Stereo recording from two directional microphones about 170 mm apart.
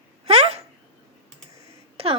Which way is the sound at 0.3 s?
35° right (ahead or behind).